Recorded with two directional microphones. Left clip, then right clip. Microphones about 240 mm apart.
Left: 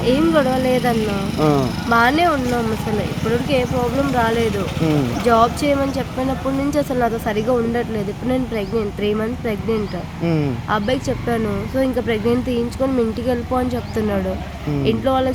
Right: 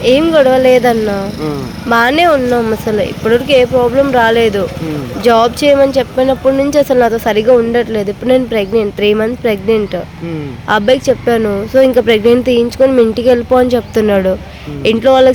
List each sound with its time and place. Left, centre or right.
0.0 s speech: right
1.4 s speech: left
1.9 s speech: right